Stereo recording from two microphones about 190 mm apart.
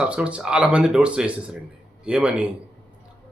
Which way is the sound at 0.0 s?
5° right (ahead or behind).